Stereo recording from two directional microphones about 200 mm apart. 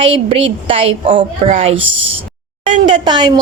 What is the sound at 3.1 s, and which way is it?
Speech, 20° right (ahead or behind).